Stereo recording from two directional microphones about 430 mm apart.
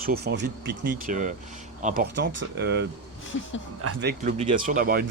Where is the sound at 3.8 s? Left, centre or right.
Right.